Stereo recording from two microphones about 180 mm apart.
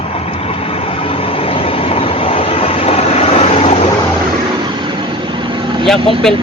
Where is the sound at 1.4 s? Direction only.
30° left (ahead or behind).